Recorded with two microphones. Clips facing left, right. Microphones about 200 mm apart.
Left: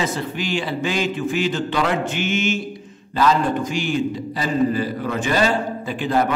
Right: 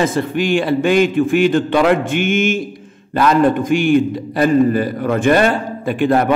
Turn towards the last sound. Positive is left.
turn(degrees=-55)  # may be behind; listen again after turning